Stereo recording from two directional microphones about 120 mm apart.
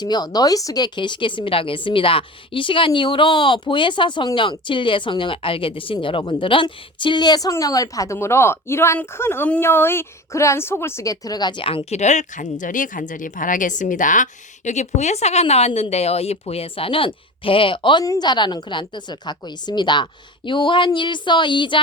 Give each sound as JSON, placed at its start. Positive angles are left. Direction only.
{"t": 0.0, "sound": "speech", "side_deg": 35}
{"t": 18.0, "sound": "a woman's voice", "side_deg": 30}